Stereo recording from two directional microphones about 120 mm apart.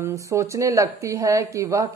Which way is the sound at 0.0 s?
25° right (ahead or behind).